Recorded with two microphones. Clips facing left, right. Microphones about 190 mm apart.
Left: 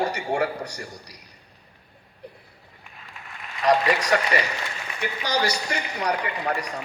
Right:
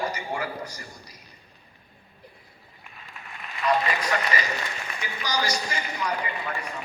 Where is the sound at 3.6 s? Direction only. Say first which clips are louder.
Left 4 dB; 90° left.